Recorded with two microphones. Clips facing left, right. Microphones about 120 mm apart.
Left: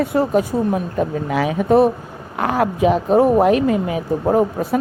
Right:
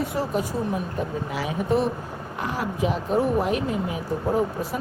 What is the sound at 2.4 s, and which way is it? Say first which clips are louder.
Speech: left 9 dB; 85° left.